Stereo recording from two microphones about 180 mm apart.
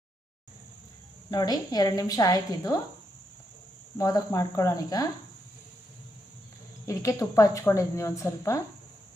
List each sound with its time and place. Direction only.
1.3 s a woman's voice: 20° left (ahead or behind)
3.9 s a woman's voice: 20° left (ahead or behind)
6.8 s a woman's voice: 15° left (ahead or behind)